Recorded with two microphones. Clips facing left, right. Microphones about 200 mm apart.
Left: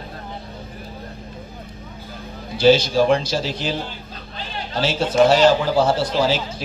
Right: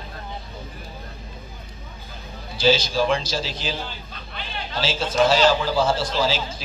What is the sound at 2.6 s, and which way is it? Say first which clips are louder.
A man's voice: left 5 dB; 60° left (ahead or behind).